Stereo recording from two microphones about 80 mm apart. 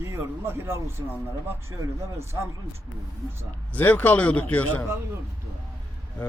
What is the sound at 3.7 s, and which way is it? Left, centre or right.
Speech, left.